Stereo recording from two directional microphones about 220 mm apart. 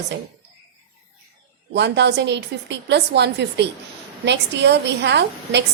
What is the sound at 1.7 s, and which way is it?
A woman's voice, 50° right (ahead or behind).